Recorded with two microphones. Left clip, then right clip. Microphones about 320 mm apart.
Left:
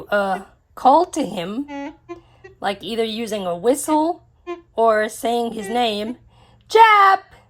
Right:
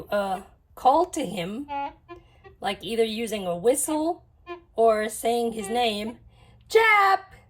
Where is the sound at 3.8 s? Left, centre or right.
Centre.